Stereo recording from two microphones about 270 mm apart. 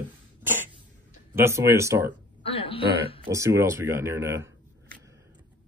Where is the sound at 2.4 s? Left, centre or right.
Left.